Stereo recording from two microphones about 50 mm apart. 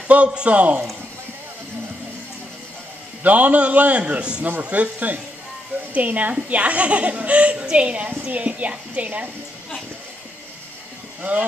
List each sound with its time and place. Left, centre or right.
0.1 s a child's voice: right
3.3 s a child's voice: right